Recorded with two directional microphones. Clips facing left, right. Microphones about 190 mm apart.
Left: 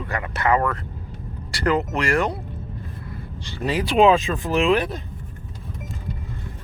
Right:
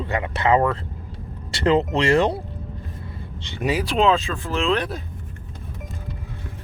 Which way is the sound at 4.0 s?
15° left (ahead or behind).